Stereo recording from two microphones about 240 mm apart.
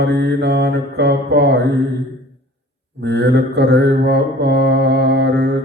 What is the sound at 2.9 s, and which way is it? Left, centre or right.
Mantra, right.